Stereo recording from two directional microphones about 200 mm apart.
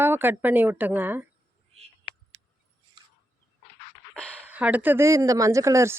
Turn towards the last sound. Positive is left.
turn(degrees=-15)  # may be behind; listen again after turning